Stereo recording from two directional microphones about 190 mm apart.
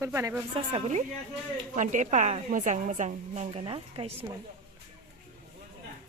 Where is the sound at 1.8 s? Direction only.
40° right (ahead or behind).